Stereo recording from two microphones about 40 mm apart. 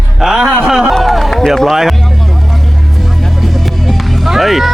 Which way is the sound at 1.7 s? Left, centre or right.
Centre.